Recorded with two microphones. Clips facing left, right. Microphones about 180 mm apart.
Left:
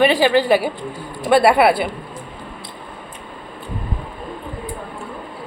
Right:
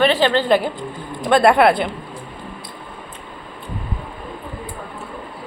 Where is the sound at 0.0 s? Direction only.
15° left (ahead or behind).